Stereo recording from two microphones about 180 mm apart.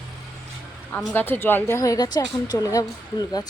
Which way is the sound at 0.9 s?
10° left (ahead or behind).